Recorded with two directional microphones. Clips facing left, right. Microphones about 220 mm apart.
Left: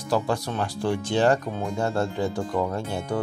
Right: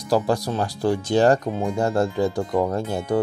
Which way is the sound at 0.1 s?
35° right (ahead or behind).